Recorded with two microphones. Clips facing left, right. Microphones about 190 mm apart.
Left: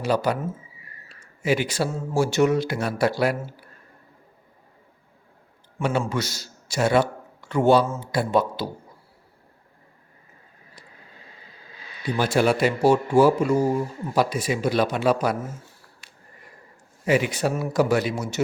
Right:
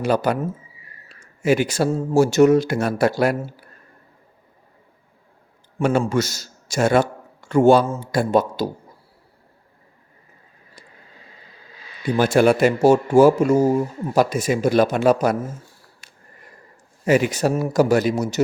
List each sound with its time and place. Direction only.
0.0 s speech: 50° right (ahead or behind)
1.4 s speech: 45° right (ahead or behind)
5.8 s a man's voice: 45° right (ahead or behind)
12.1 s speech: 50° right (ahead or behind)
16.0 s a sound: 45° right (ahead or behind)
17.1 s speech: 45° right (ahead or behind)